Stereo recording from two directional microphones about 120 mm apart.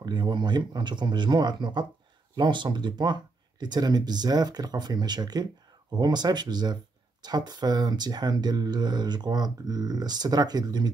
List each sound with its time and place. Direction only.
0.0 s speech: 40° right (ahead or behind)